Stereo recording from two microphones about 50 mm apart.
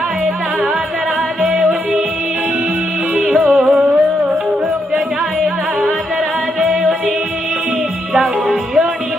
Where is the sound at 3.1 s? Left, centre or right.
Centre.